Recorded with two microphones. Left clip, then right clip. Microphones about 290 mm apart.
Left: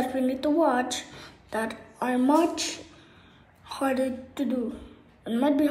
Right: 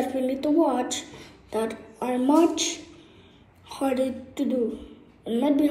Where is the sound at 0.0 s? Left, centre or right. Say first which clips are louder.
Right 1 dB; centre.